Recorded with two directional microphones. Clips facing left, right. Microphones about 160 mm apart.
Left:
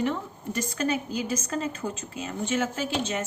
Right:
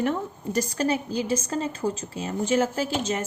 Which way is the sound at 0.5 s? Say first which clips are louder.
Right 3 dB; 35° right (ahead or behind).